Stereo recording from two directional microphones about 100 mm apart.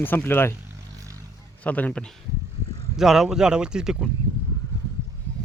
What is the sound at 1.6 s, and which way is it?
Speech, 15° left (ahead or behind).